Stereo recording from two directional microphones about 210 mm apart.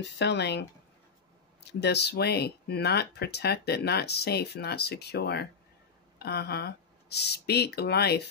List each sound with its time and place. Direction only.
0.2 s speech: 55° left (ahead or behind)